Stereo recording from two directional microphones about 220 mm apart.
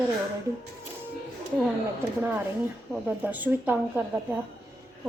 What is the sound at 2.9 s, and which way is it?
A woman's voice, 10° right (ahead or behind).